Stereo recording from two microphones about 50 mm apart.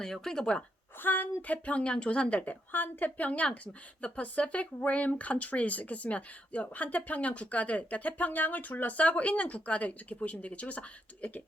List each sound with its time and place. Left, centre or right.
0.0 s speech: centre
0.9 s speech: left